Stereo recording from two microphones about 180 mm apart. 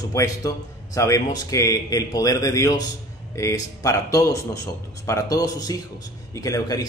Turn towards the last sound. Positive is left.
turn(degrees=20)  # may be behind; listen again after turning